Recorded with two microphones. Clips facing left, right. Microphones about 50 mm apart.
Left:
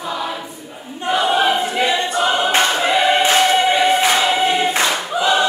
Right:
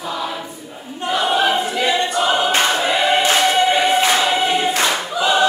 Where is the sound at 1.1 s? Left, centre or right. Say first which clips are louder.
Left 1 dB; centre.